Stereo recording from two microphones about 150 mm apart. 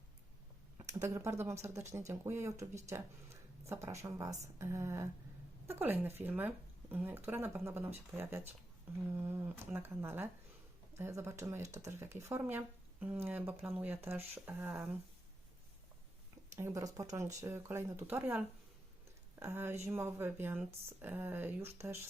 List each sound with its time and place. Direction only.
1.0 s speech: 20° right (ahead or behind)
16.6 s speech: 20° right (ahead or behind)